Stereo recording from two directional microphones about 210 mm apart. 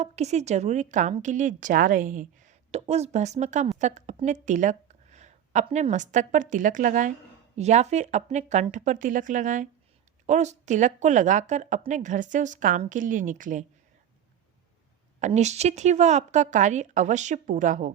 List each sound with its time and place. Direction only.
0.0 s a woman's voice: 30° right (ahead or behind)
15.2 s a woman's voice: 30° right (ahead or behind)